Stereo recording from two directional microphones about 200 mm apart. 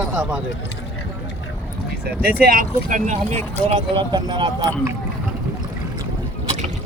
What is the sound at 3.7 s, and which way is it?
Speech, 25° right (ahead or behind).